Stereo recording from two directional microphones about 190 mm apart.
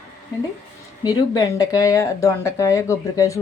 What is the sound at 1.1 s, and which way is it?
Speech, 20° left (ahead or behind).